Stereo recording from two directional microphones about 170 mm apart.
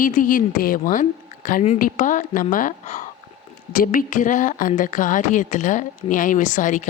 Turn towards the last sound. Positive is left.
turn(degrees=45)  # may be behind; listen again after turning